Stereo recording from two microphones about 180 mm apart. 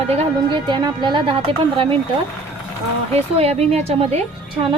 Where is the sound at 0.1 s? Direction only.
25° right (ahead or behind).